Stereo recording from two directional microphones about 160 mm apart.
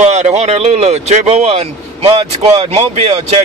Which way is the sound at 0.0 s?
45° right (ahead or behind).